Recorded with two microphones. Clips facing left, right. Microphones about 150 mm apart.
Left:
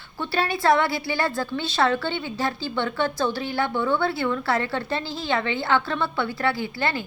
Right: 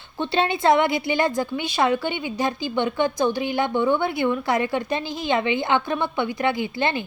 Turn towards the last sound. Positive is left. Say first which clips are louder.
# right 3 dB
turn(degrees=-20)  # may be behind; listen again after turning